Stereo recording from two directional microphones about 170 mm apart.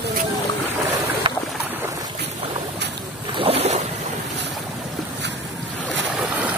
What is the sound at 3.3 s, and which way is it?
Boat, 35° right (ahead or behind).